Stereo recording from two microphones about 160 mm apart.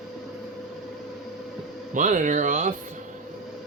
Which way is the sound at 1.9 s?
50° right (ahead or behind).